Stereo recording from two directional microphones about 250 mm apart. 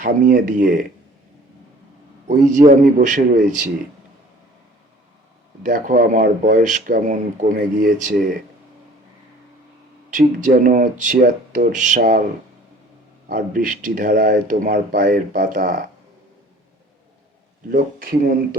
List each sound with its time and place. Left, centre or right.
0.0 s speech: right
2.5 s speech: right
5.6 s speech: right
10.1 s speech: right
13.2 s speech: right
17.7 s speech: right